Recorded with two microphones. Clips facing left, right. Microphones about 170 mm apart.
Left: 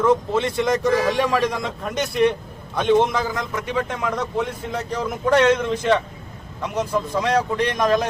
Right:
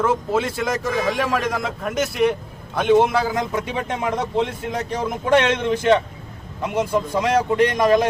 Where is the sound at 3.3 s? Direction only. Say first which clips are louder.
Right 1 dB; 20° right (ahead or behind).